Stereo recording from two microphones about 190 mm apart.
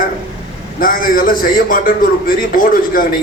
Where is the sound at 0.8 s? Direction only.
45° left (ahead or behind).